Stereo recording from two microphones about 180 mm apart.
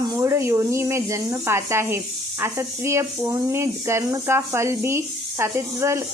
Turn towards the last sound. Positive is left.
turn(degrees=-15)  # may be behind; listen again after turning